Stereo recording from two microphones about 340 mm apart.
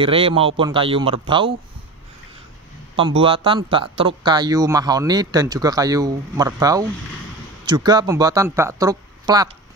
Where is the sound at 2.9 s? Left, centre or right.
Centre.